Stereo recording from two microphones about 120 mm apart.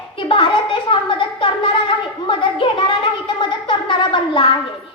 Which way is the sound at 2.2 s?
40° left (ahead or behind).